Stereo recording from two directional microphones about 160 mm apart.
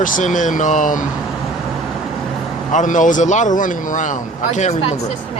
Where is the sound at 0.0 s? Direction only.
55° left (ahead or behind).